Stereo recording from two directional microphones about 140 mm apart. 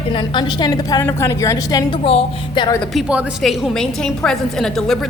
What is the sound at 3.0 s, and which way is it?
A woman's voice, 5° right (ahead or behind).